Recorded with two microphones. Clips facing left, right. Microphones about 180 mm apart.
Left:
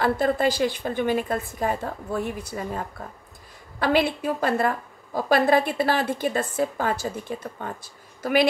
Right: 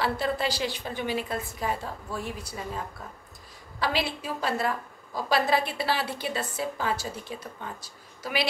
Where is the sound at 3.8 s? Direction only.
55° left (ahead or behind).